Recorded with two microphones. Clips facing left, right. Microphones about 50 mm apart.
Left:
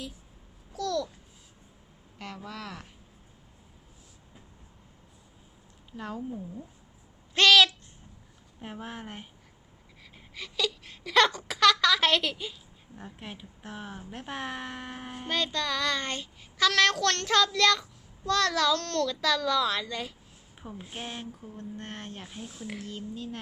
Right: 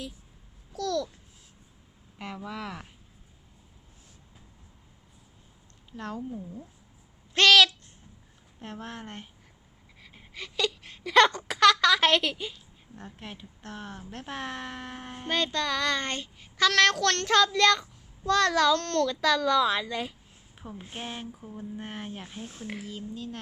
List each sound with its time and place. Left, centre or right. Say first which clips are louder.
0.7 s babbling: right 1 dB; centre
2.1 s a woman's voice: right 3 dB; centre
6.0 s speech: even; centre
7.3 s a sound: right 1 dB; centre
8.5 s speech: even; centre
10.0 s whimper: right 1 dB; centre
11.3 s a woman's voice: right 2 dB; centre
13.0 s speech: even; centre
17.2 s a woman's voice: right 2 dB; centre
20.6 s speech: even; centre
22.4 s speech: right 1 dB; right
22.7 s speech: even; centre